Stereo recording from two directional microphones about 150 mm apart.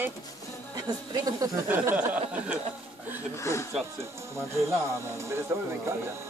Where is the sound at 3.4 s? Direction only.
20° left (ahead or behind).